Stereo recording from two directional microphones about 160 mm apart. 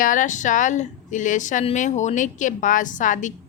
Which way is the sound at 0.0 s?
55° left (ahead or behind).